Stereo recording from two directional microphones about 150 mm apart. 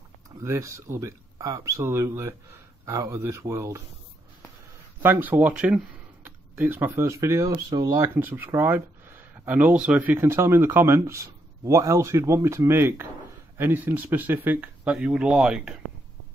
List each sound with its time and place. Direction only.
0.4 s speech: 20° right (ahead or behind)
5.0 s speech: 15° right (ahead or behind)